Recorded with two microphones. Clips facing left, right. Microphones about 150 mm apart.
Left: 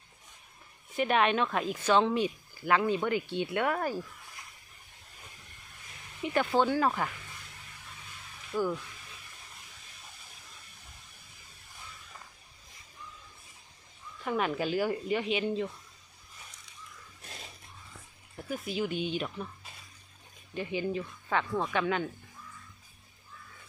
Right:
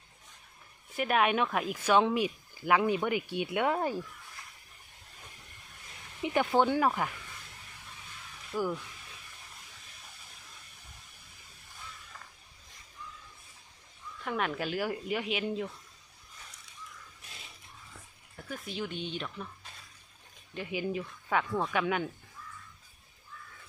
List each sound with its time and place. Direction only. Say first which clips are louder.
0.9 s speech: left 1 dB; 5° right (ahead or behind); by 3.9 s 20° right (ahead or behind)
6.2 s speech: even; 15° right (ahead or behind)
8.5 s speech: left 2 dB; 5° right (ahead or behind)
14.3 s speech: left 3 dB; 5° left (ahead or behind)
18.4 s speech: left 5 dB; 5° left (ahead or behind)
20.5 s speech: left 2 dB; 5° right (ahead or behind)